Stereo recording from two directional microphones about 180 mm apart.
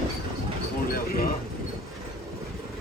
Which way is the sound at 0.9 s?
55° left (ahead or behind).